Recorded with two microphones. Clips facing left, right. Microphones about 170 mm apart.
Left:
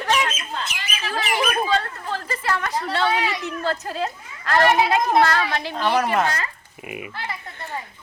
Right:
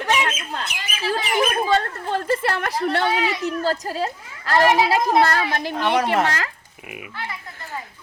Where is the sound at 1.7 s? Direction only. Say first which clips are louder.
Right 3 dB; 50° right (ahead or behind).